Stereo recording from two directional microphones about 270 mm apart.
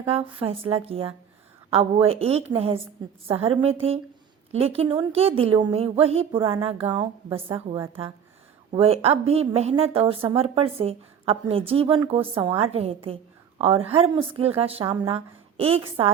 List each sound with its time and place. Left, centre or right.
0.1 s a woman's voice: centre